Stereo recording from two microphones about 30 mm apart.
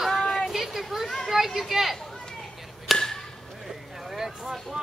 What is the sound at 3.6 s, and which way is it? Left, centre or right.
Vehicle, centre.